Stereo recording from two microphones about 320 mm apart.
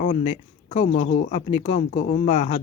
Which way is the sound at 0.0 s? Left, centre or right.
Centre.